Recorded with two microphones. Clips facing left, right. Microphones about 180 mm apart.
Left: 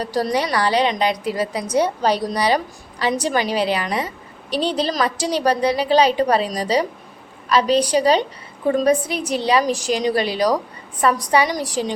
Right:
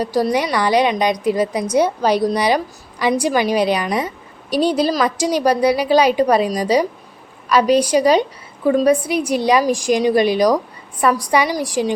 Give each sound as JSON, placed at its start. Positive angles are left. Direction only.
{"t": 0.0, "sound": "a woman's voice", "side_deg": -10}